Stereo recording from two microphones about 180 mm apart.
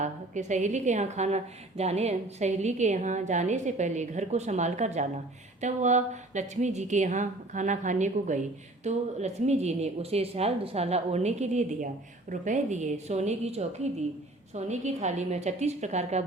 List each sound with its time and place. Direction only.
0.0 s a woman's voice: 40° right (ahead or behind)